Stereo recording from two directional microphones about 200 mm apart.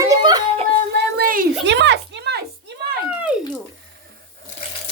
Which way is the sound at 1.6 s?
60° right (ahead or behind).